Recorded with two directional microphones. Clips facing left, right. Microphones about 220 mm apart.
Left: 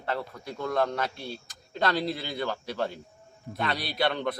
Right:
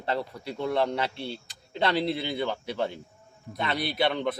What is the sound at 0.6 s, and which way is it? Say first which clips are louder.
Speech: right 1 dB; 10° right (ahead or behind).